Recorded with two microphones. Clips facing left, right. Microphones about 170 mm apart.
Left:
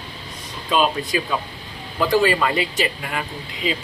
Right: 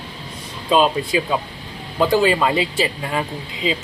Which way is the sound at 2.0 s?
25° right (ahead or behind).